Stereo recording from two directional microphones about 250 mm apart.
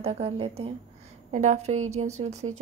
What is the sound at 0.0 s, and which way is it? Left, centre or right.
A woman's voice, right.